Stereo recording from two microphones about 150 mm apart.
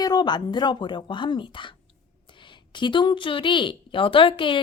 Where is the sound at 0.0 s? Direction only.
30° left (ahead or behind).